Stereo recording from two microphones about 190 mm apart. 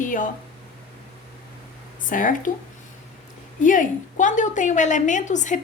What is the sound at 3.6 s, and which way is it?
A woman's voice, 45° left (ahead or behind).